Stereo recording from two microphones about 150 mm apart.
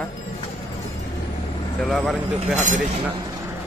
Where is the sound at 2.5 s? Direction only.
55° right (ahead or behind).